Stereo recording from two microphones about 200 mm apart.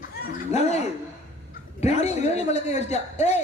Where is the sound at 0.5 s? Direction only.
35° left (ahead or behind).